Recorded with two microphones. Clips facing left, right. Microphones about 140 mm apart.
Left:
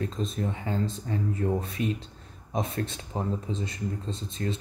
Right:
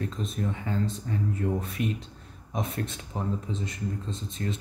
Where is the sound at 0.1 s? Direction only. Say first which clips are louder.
Left 1 dB; 30° left (ahead or behind).